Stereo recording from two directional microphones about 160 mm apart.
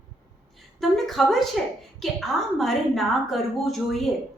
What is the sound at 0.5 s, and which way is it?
A woman's voice, centre (ahead or behind).